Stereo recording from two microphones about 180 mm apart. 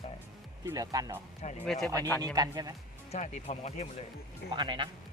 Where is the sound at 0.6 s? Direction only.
20° right (ahead or behind).